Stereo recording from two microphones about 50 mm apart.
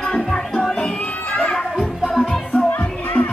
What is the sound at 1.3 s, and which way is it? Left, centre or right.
Children playing, left.